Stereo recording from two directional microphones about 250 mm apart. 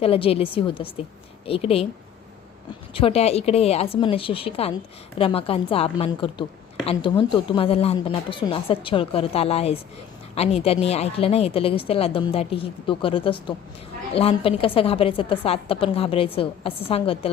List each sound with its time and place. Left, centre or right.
0.0 s a woman's voice: left
2.9 s a woman's voice: left